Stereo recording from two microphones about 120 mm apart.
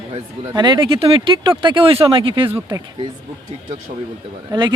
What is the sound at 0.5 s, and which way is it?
Speech, 40° right (ahead or behind).